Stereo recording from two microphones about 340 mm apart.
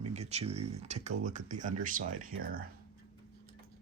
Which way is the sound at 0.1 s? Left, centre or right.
Centre.